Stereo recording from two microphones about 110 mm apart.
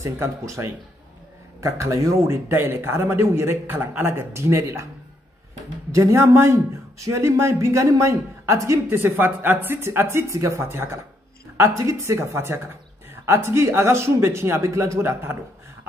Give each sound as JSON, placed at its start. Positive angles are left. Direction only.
{"t": 0.0, "sound": "a man's voice", "side_deg": -25}
{"t": 5.9, "sound": "a man's voice", "side_deg": -30}